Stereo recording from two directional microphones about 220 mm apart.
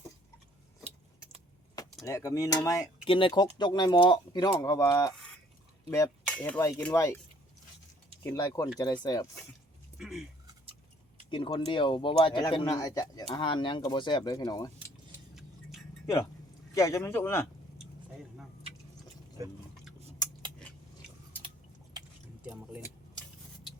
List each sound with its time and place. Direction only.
2.0 s speech: 15° left (ahead or behind)
8.2 s speech: 15° left (ahead or behind)
10.0 s speech: centre (ahead or behind)
11.3 s speech: 25° left (ahead or behind)
16.7 s speech: 15° left (ahead or behind)
19.4 s speech: 15° right (ahead or behind)
22.4 s a sound: 5° right (ahead or behind)